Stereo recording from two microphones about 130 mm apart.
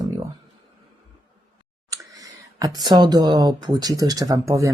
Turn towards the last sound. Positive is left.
turn(degrees=-25)  # may be behind; listen again after turning